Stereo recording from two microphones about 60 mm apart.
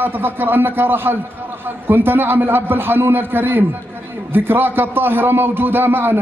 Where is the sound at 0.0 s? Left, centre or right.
Right.